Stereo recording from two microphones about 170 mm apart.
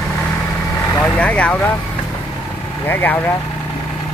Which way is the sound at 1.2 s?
5° left (ahead or behind).